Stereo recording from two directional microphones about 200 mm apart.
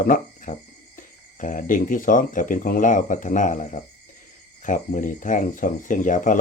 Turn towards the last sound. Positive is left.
turn(degrees=40)  # may be behind; listen again after turning